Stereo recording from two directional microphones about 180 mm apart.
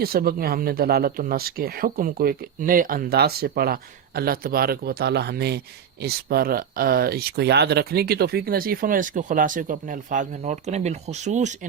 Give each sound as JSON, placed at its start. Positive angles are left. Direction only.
{"t": 0.0, "sound": "speech", "side_deg": -55}